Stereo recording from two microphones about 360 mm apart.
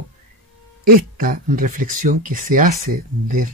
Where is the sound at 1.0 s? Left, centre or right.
Right.